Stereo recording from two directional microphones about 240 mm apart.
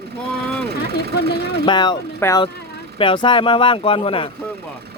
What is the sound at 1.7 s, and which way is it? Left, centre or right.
Speech, centre.